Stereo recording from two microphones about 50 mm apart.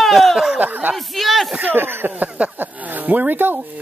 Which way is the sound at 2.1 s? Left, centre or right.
Right.